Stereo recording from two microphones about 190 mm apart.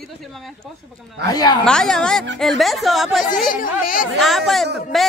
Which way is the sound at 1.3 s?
20° left (ahead or behind).